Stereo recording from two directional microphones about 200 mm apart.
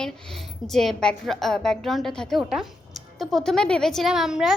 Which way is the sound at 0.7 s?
Centre (ahead or behind).